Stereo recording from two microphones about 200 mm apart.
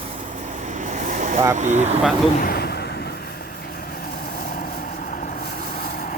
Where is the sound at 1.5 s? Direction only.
35° right (ahead or behind).